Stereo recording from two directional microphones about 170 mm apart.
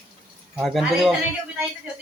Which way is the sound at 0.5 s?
Centre (ahead or behind).